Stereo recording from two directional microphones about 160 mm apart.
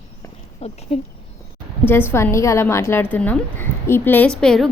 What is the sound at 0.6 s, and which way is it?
Speech, 40° left (ahead or behind).